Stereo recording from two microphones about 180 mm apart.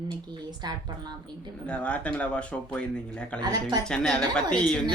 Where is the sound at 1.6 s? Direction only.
5° left (ahead or behind).